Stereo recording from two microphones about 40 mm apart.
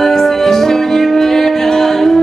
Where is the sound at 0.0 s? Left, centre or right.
Centre.